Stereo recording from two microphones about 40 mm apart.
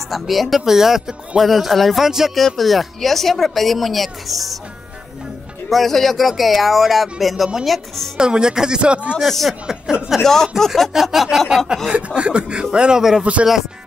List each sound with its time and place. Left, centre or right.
0.1 s speech: centre
2.3 s speech: centre
5.7 s speech: centre
8.2 s speech: centre
9.2 s speech: centre
9.5 s speech: centre
10.2 s speech: centre
10.9 s speech: centre
11.9 s speech: right